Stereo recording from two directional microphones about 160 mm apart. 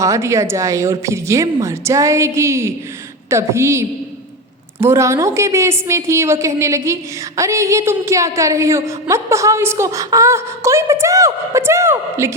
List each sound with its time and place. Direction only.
0.0 s a woman's voice: 20° right (ahead or behind)